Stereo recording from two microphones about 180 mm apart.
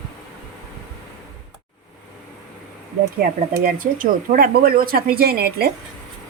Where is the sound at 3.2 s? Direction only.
55° right (ahead or behind).